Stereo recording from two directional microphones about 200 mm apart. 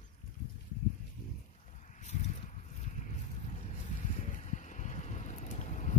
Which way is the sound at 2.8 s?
35° left (ahead or behind).